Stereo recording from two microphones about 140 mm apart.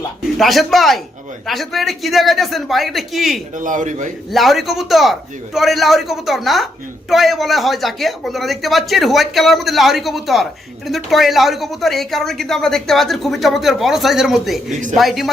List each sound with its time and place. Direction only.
0.3 s a woman's voice: centre (ahead or behind)
3.6 s a man's voice: 65° right (ahead or behind)
4.3 s a woman's voice: centre (ahead or behind)